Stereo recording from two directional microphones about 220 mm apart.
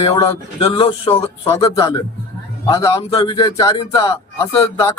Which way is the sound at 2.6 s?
15° left (ahead or behind).